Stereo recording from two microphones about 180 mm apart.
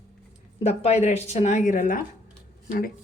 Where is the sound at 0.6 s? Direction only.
35° left (ahead or behind); by 2.9 s 55° left (ahead or behind).